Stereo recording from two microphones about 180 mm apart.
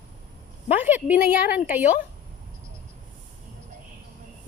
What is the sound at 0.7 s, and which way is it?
A woman's voice, 10° right (ahead or behind).